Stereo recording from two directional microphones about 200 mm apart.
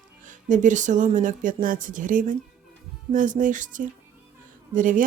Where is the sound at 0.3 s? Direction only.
40° right (ahead or behind).